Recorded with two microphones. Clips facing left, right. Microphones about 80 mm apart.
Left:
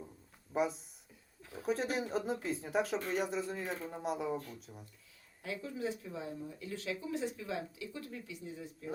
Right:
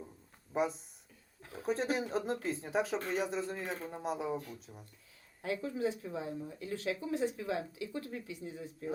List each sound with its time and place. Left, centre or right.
0.5 s speech: centre
1.4 s a sound: right
1.6 s speech: centre
5.4 s speech: right